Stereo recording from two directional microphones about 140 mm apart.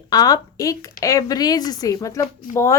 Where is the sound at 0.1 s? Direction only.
25° left (ahead or behind).